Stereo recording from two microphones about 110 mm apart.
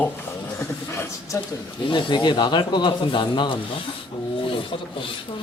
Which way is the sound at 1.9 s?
50° left (ahead or behind).